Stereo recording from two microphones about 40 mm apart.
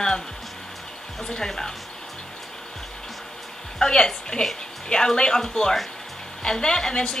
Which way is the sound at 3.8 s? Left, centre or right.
Centre.